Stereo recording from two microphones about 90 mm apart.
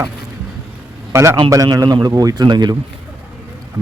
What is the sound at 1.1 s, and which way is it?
Speech, 30° right (ahead or behind).